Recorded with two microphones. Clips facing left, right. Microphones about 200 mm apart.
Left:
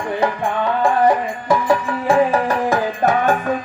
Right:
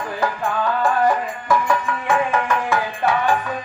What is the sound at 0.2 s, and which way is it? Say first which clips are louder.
Music: left 2 dB; 25° left (ahead or behind).